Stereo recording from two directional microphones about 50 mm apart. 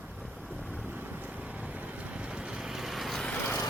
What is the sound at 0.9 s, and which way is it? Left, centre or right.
Vehicle, right.